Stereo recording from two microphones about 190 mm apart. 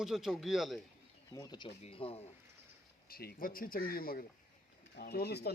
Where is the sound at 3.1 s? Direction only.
50° left (ahead or behind).